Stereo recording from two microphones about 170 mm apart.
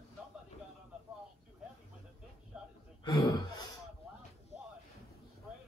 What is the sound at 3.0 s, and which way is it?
Speech, 25° left (ahead or behind).